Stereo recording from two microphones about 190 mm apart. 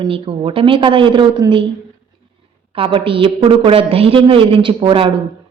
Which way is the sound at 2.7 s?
30° right (ahead or behind).